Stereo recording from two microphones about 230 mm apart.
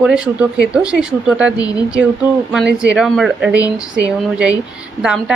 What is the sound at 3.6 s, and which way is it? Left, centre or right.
Speech, centre.